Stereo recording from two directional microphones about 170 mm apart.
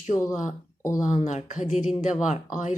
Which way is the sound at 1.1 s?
45° left (ahead or behind).